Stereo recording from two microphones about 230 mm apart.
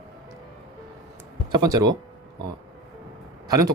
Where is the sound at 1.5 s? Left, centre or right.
Centre.